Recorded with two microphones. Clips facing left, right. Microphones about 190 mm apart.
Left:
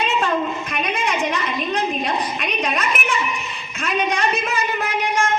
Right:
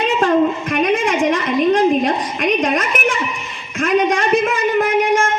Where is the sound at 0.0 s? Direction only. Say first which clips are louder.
Right 7 dB; 50° right (ahead or behind).